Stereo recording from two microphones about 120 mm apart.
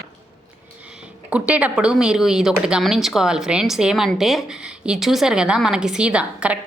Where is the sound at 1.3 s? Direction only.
10° right (ahead or behind).